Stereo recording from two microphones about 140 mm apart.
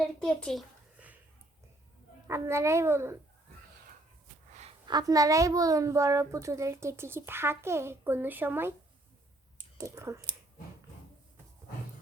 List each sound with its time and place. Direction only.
0.0 s a child's voice: 5° left (ahead or behind)
2.2 s a woman's voice: 20° right (ahead or behind)
4.9 s a woman's voice: 25° right (ahead or behind)
9.7 s a woman's voice: 25° right (ahead or behind)